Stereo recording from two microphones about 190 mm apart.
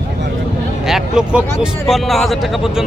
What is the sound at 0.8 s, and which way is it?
Speech, centre (ahead or behind).